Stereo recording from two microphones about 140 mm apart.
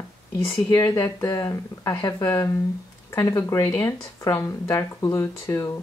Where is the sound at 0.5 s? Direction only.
30° left (ahead or behind).